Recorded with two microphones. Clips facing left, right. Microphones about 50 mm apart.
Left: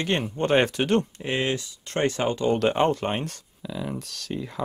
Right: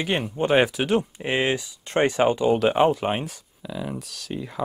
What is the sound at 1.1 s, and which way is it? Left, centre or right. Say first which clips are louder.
Speech: right 3 dB; centre.